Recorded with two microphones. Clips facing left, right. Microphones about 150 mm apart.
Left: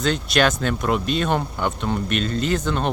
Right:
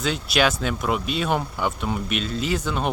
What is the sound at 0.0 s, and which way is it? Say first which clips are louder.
Speech: left 2 dB; 5° right (ahead or behind).